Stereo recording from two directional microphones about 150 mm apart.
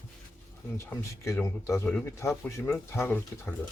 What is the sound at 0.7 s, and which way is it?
Speech, 20° left (ahead or behind).